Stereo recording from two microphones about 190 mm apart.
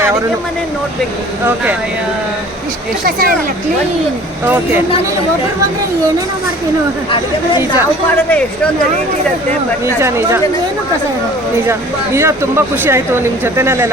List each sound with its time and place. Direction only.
4.4 s speech: 10° right (ahead or behind)
7.1 s speech: 25° left (ahead or behind)
9.8 s speech: 15° right (ahead or behind)
11.7 s speech: 15° right (ahead or behind)